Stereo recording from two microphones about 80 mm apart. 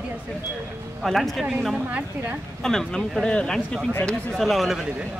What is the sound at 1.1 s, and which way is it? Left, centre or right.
Speech, centre.